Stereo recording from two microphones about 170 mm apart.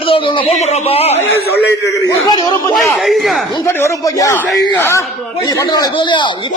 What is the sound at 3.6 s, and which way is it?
Speech, 15° left (ahead or behind).